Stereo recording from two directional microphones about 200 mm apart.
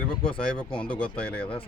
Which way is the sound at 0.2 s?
25° left (ahead or behind).